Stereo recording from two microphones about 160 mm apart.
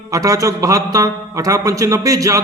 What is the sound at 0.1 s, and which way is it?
A man's voice, 20° right (ahead or behind).